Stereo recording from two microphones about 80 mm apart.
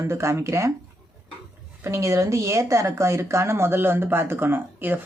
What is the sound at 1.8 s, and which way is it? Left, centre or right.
Speech, right.